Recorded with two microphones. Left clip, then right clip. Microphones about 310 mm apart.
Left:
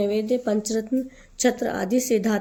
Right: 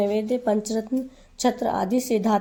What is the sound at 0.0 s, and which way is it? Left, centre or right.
A woman's voice, right.